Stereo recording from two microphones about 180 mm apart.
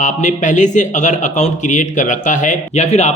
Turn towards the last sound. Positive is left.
turn(degrees=40)  # may be behind; listen again after turning